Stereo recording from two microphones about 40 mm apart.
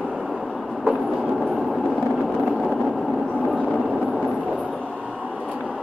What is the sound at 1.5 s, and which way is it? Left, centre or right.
Vehicle, centre.